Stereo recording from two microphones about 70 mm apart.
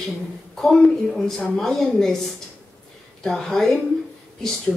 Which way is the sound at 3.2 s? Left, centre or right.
Centre.